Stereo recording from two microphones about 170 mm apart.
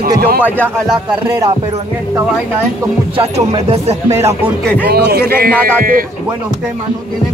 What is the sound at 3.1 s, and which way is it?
Speech, 35° right (ahead or behind).